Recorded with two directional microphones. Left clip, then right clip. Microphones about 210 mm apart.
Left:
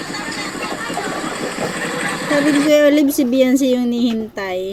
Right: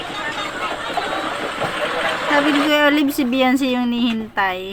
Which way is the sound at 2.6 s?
Centre (ahead or behind).